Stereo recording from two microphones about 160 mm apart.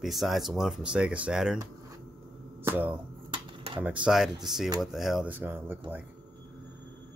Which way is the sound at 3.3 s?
30° right (ahead or behind).